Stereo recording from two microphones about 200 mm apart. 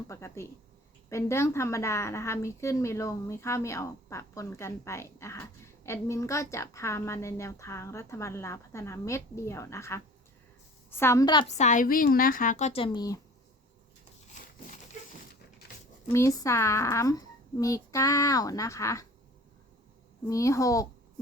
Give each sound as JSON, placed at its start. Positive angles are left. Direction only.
{"t": 0.1, "sound": "a woman's voice", "side_deg": 15}
{"t": 11.4, "sound": "speech", "side_deg": 35}
{"t": 16.1, "sound": "a woman's voice", "side_deg": 15}
{"t": 20.2, "sound": "a woman's voice", "side_deg": 15}